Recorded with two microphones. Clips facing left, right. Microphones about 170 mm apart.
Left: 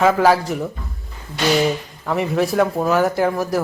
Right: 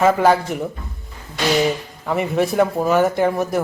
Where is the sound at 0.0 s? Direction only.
Centre (ahead or behind).